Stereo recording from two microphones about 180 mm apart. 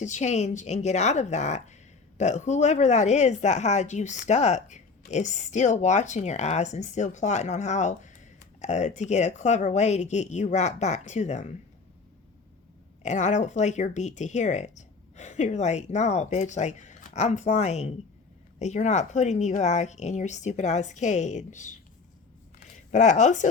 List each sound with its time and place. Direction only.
0.0 s a woman's voice: 40° left (ahead or behind)
13.0 s a woman's voice: 40° left (ahead or behind)
22.9 s a woman's voice: 40° left (ahead or behind)